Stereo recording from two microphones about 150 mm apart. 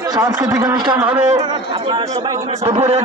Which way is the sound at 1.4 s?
30° right (ahead or behind).